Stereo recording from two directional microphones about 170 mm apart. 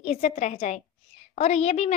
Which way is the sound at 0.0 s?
40° left (ahead or behind).